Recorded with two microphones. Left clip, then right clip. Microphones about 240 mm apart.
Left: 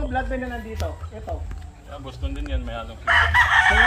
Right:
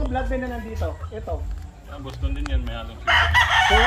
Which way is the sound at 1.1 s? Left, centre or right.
Centre.